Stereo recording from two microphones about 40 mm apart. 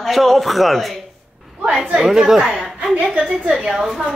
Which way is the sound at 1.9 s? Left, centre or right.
Centre.